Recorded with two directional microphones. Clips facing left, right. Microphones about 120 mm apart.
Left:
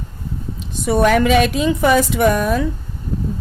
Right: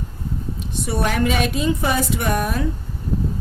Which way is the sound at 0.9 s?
90° left.